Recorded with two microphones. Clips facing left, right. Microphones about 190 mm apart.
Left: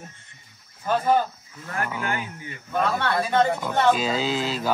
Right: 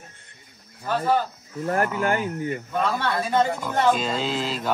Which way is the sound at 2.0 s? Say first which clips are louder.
Right 7 dB; 45° right (ahead or behind).